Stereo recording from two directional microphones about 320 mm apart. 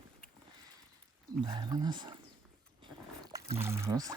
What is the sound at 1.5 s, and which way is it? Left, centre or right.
Speech, centre.